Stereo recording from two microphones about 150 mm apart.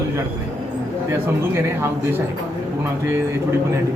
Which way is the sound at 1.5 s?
15° right (ahead or behind).